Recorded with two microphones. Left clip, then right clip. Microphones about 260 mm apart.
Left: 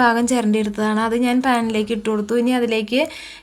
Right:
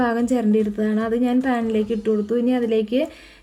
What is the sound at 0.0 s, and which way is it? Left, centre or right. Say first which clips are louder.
A woman's voice: left 4 dB; centre.